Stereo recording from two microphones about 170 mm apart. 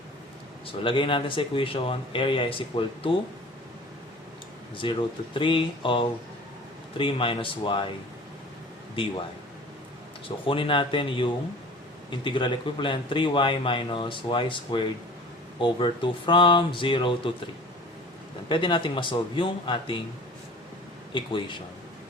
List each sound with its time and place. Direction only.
0.9 s speech: 30° left (ahead or behind)
4.8 s a man's voice: 30° left (ahead or behind)
10.2 s a man's voice: 30° left (ahead or behind)
18.4 s a man's voice: 30° left (ahead or behind)
21.1 s a man's voice: 30° left (ahead or behind)